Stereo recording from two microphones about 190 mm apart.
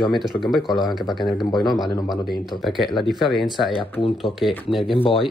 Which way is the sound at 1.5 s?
20° left (ahead or behind).